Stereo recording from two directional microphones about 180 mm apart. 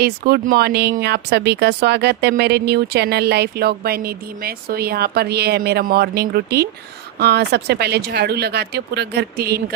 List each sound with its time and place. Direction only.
0.0 s speech: 60° right (ahead or behind)